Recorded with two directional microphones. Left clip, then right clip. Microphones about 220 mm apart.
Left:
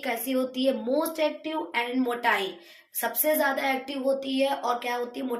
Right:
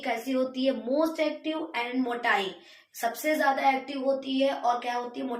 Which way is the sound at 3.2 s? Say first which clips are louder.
Right 1 dB; 50° left (ahead or behind).